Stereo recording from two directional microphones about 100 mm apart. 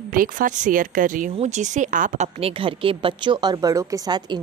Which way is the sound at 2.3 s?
70° right (ahead or behind).